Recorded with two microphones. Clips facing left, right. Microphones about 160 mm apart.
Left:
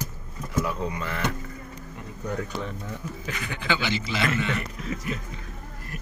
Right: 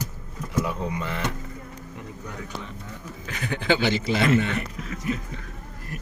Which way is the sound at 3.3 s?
50° right (ahead or behind).